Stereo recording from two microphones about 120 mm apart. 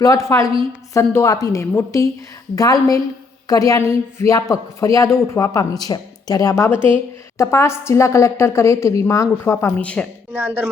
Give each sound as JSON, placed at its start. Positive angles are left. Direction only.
{"t": 0.0, "sound": "a woman's voice", "side_deg": 25}
{"t": 3.5, "sound": "a woman's voice", "side_deg": 30}
{"t": 10.3, "sound": "speech", "side_deg": -15}